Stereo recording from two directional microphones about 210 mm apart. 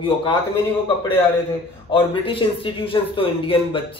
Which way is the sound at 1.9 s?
25° left (ahead or behind).